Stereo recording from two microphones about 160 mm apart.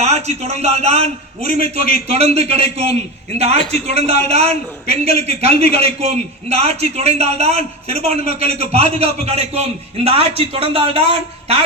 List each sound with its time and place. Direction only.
0.0 s a man's voice: 45° right (ahead or behind)